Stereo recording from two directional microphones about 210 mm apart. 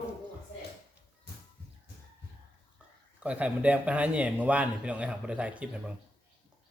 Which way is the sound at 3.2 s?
5° right (ahead or behind).